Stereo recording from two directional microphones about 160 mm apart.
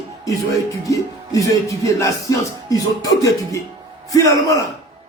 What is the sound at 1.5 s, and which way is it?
Speech, 20° left (ahead or behind).